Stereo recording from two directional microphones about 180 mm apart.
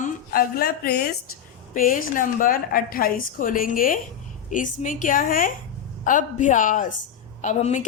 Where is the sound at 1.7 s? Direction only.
50° left (ahead or behind).